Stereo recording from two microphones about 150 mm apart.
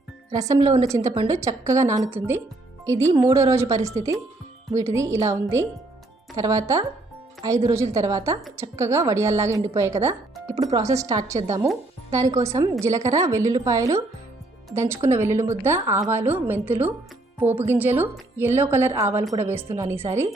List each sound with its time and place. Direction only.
0.3 s a woman's voice: 25° right (ahead or behind)